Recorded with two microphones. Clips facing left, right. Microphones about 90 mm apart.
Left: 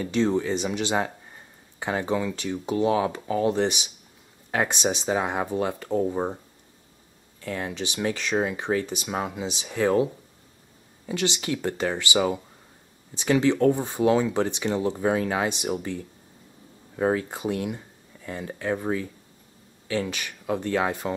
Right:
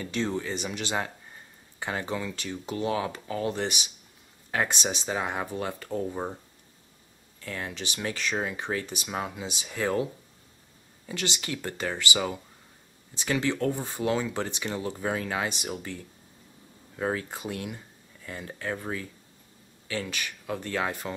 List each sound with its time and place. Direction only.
0.0 s speech: 20° left (ahead or behind)
7.4 s speech: 20° left (ahead or behind)
13.2 s speech: 20° left (ahead or behind)
17.0 s speech: 25° left (ahead or behind)